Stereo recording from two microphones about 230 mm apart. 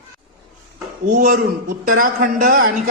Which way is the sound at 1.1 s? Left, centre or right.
Right.